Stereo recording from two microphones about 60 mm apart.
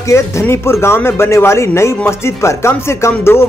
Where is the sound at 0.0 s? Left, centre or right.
Left.